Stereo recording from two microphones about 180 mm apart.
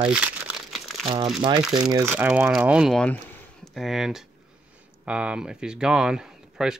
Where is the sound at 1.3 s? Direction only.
25° right (ahead or behind).